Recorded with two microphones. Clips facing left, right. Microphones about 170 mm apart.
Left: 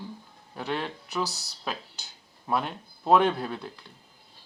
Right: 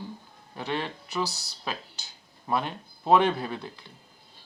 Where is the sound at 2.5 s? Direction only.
Centre (ahead or behind).